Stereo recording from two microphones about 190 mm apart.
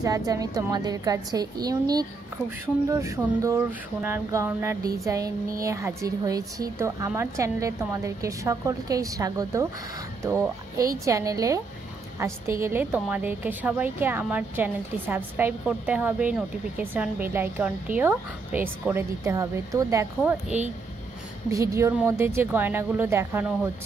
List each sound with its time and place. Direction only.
0.0 s a woman's voice: 20° right (ahead or behind)
20.2 s a woman's voice: 5° right (ahead or behind)
21.5 s a woman's voice: 15° right (ahead or behind)